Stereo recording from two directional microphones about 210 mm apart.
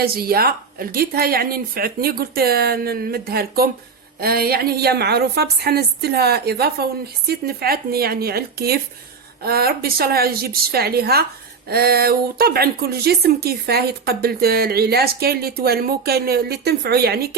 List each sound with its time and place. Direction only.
0.0 s speech: 45° right (ahead or behind)